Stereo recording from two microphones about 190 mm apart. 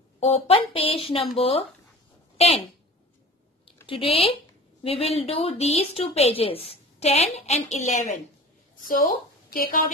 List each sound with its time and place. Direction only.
0.2 s speech: 30° left (ahead or behind)
4.0 s a woman's voice: 30° left (ahead or behind)
8.8 s a woman's voice: 50° left (ahead or behind)